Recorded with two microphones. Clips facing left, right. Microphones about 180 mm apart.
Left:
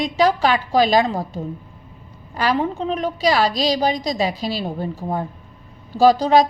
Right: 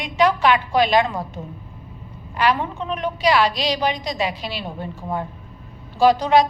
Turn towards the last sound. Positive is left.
turn(degrees=35)  # may be behind; listen again after turning